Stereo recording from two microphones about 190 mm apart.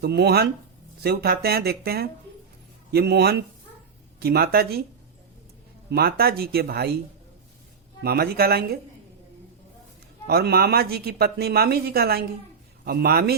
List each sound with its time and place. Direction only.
0.0 s speech: 60° right (ahead or behind)
5.9 s speech: 55° right (ahead or behind)
8.0 s speech: 55° right (ahead or behind)
10.2 s speech: 55° right (ahead or behind)